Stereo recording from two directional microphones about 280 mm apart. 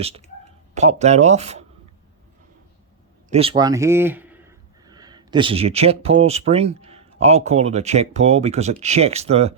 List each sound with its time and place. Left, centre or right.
0.7 s speech: right
3.2 s speech: right